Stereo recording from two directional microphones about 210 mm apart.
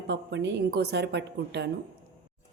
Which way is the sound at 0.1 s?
55° right (ahead or behind).